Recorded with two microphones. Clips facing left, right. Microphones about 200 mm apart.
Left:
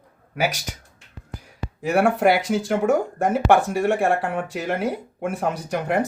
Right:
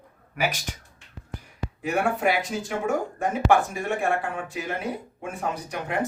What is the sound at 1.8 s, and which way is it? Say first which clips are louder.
Speech: left 6 dB; 85° left.